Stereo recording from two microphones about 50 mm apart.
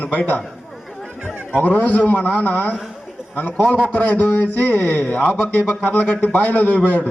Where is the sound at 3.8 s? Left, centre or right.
Left.